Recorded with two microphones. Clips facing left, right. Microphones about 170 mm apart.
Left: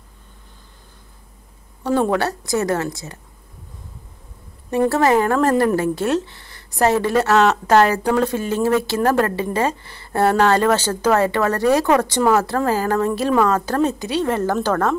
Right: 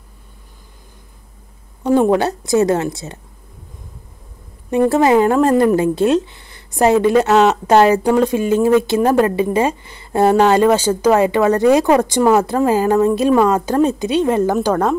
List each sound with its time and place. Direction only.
1.8 s a woman's voice: 15° right (ahead or behind)
4.6 s speech: 20° right (ahead or behind)